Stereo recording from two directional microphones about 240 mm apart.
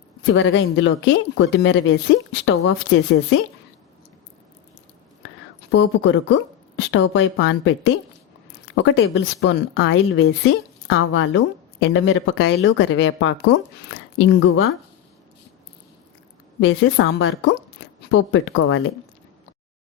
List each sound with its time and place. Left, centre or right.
0.3 s a woman's voice: left
5.7 s speech: left
8.7 s a woman's voice: left
16.6 s a woman's voice: left